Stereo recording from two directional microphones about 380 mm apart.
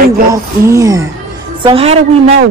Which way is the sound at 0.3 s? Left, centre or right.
Centre.